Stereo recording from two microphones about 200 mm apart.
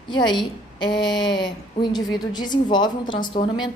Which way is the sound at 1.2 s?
20° left (ahead or behind).